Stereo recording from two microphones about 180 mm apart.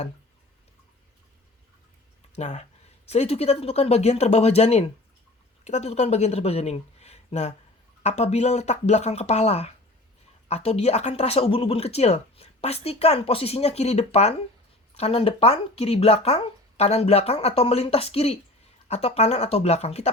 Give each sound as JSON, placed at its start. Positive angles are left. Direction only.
{"t": 2.3, "sound": "speech", "side_deg": 40}